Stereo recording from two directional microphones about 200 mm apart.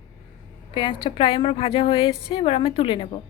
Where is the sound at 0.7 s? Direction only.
25° left (ahead or behind).